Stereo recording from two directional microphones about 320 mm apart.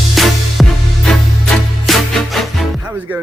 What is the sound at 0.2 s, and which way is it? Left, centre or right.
Music, centre.